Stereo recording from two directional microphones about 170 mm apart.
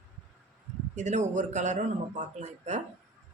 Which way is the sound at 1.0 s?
45° right (ahead or behind).